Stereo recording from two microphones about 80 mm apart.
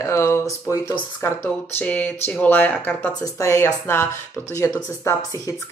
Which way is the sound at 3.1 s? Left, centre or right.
Left.